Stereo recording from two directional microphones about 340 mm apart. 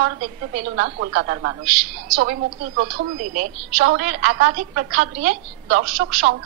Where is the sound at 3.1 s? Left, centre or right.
Right.